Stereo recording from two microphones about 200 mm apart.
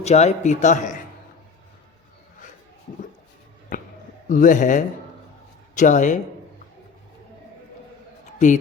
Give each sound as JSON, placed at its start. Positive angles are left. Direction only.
{"t": 0.0, "sound": "a man's voice", "side_deg": 35}
{"t": 3.7, "sound": "a man's voice", "side_deg": 40}
{"t": 8.4, "sound": "a man's voice", "side_deg": 35}